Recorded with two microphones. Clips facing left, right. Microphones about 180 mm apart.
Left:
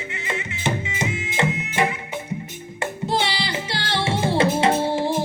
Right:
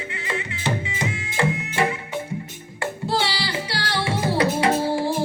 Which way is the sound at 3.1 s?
20° left (ahead or behind).